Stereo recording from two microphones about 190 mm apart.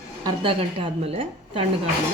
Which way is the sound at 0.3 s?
25° right (ahead or behind).